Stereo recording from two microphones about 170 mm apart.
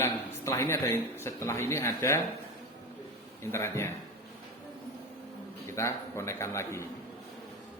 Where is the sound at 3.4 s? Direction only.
15° left (ahead or behind).